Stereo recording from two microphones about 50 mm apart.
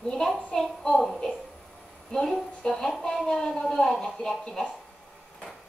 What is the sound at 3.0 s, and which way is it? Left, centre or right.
Music, centre.